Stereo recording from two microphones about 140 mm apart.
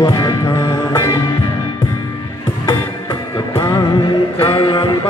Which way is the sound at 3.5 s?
30° left (ahead or behind).